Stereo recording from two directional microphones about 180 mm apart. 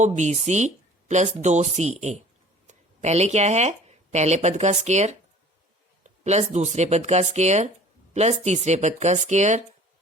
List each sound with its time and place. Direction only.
0.2 s speech: 40° right (ahead or behind)